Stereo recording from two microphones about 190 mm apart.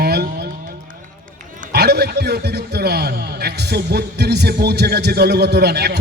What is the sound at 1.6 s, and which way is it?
A man's voice, 60° right (ahead or behind).